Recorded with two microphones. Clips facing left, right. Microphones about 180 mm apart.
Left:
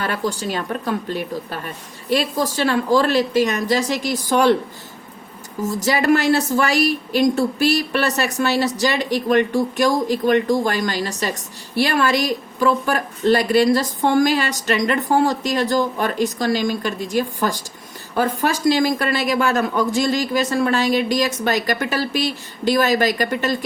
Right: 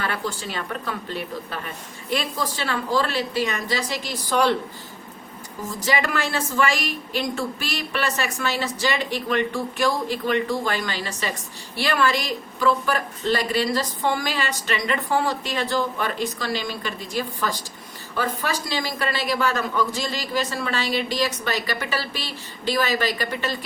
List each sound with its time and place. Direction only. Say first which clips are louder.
0.0 s speech: left 5 dB; 40° left (ahead or behind)
5.8 s a woman's voice: left 7 dB; 40° left (ahead or behind)